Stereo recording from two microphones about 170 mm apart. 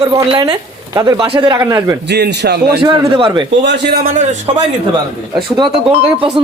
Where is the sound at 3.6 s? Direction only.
85° right.